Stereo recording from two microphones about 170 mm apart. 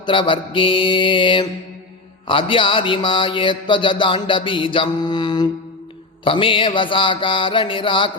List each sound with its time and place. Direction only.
0.0 s speech: 30° left (ahead or behind)